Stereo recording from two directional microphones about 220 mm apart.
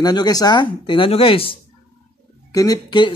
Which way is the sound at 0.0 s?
20° left (ahead or behind).